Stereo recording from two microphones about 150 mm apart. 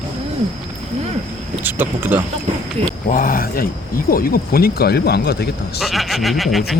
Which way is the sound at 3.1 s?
65° left (ahead or behind).